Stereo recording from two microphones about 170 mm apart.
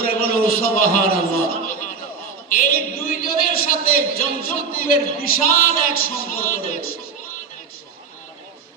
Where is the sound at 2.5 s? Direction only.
55° left (ahead or behind).